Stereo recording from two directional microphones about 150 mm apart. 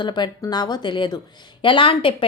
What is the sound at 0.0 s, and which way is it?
Speech, 30° left (ahead or behind).